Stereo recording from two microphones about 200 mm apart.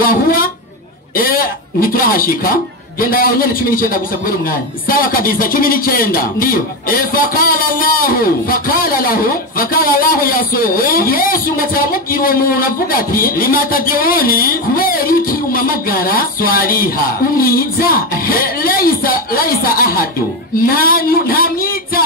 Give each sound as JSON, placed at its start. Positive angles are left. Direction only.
{"t": 0.0, "sound": "speech", "side_deg": 45}